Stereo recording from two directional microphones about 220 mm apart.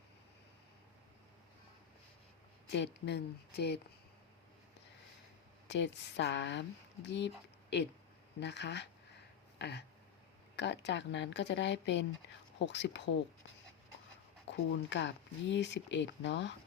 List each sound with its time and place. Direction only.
2.7 s speech: 50° left (ahead or behind)
5.6 s speech: 50° left (ahead or behind)
8.4 s speech: 50° left (ahead or behind)
9.6 s a sound: 50° left (ahead or behind)
10.5 s speech: 50° left (ahead or behind)
14.4 s speech: 55° left (ahead or behind)